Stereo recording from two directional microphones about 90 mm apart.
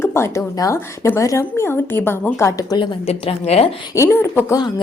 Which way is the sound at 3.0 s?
90° left.